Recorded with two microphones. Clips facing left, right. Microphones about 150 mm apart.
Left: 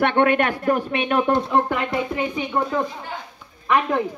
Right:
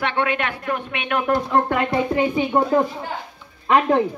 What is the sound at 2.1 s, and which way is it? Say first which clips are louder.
Speech: right 5 dB; 25° right (ahead or behind).